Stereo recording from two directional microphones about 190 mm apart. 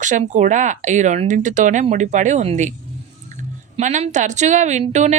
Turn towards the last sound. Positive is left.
turn(degrees=-35)  # may be behind; listen again after turning